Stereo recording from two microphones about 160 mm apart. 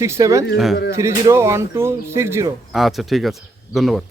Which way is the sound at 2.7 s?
Centre (ahead or behind).